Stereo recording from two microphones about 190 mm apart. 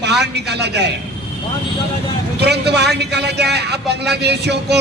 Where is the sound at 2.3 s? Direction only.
60° right (ahead or behind).